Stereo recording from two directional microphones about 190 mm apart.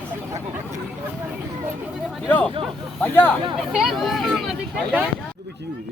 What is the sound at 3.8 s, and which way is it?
Speech, centre (ahead or behind).